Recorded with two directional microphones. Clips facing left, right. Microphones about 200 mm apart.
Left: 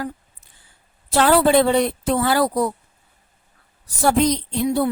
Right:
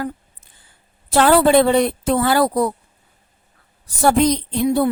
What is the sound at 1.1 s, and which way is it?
A woman's voice, 55° right (ahead or behind).